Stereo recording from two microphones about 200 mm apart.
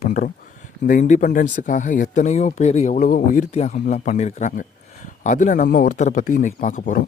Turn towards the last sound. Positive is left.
turn(degrees=40)  # may be behind; listen again after turning